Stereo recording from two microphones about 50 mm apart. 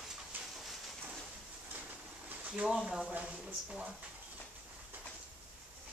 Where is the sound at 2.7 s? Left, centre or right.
Centre.